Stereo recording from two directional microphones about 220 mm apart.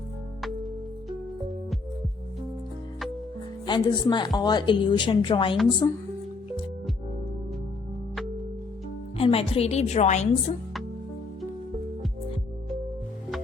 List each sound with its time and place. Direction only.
3.7 s a woman's voice: 20° left (ahead or behind)
9.1 s a woman's voice: 25° left (ahead or behind)